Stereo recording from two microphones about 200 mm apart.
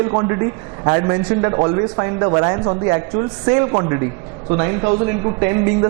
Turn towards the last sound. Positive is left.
turn(degrees=-20)  # may be behind; listen again after turning